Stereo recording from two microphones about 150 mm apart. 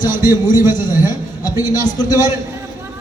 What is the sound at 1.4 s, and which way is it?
Speech, 25° left (ahead or behind).